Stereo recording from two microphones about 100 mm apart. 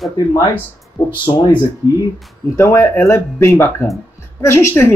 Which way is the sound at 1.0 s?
50° left (ahead or behind).